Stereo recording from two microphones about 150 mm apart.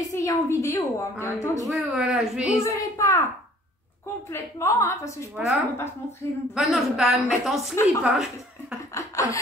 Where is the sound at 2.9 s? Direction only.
20° left (ahead or behind).